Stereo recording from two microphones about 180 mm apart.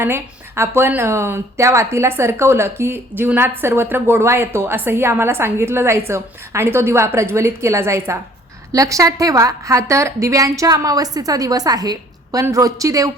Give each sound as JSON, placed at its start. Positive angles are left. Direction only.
{"t": 0.0, "sound": "a woman's voice", "side_deg": -15}